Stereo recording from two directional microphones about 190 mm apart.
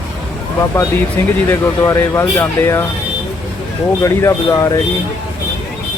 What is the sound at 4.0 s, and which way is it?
Speech, 15° left (ahead or behind).